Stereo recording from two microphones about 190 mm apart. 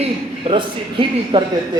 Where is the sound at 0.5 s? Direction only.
30° right (ahead or behind).